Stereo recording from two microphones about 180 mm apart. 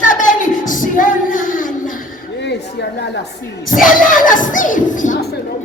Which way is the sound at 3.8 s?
50° left (ahead or behind).